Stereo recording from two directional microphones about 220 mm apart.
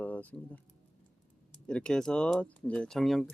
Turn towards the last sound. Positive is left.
turn(degrees=0)  # may be behind; listen again after turning